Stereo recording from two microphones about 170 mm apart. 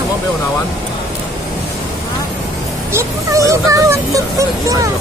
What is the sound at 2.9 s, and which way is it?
Speech, 20° right (ahead or behind).